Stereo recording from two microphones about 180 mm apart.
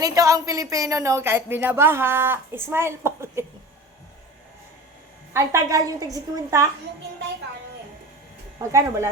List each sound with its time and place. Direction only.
0.0 s a woman's voice: 20° right (ahead or behind)
5.3 s a woman's voice: 15° right (ahead or behind)
8.7 s a woman's voice: 15° right (ahead or behind)